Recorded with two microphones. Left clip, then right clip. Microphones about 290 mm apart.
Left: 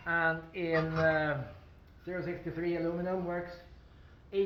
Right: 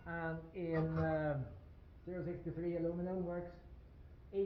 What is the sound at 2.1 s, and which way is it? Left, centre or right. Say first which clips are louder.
Speech: left 7 dB; left.